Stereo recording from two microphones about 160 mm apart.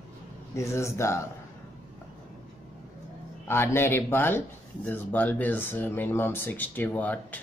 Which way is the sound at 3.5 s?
15° left (ahead or behind).